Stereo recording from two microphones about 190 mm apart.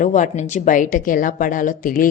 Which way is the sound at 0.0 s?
40° left (ahead or behind).